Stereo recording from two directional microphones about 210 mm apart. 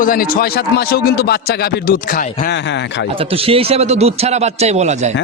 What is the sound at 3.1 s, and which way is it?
A man's voice, 25° right (ahead or behind).